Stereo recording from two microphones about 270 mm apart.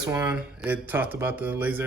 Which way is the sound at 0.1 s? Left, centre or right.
Centre.